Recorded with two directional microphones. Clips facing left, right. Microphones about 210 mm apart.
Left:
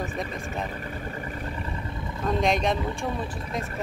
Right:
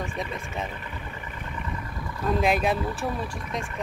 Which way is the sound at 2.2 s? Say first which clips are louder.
Right 1 dB; 5° right (ahead or behind).